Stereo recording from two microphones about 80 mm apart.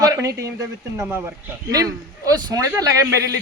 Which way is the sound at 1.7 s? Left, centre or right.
Right.